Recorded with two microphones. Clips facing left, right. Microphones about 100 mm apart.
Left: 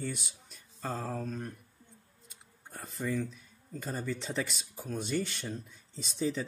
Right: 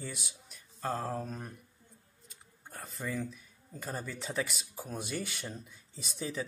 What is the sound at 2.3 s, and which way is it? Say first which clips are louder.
Computer keyboard: even; centre (ahead or behind).